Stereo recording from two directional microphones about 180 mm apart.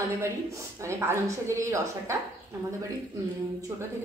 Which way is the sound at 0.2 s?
15° right (ahead or behind).